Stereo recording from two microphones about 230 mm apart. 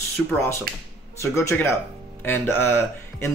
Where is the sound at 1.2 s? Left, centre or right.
Centre.